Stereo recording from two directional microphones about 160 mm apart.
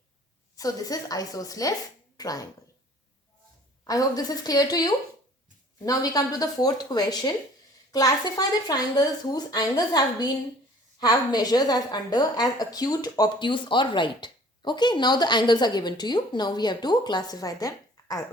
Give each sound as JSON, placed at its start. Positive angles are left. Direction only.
{"t": 0.5, "sound": "a woman's voice", "side_deg": 20}
{"t": 3.8, "sound": "a woman's voice", "side_deg": 20}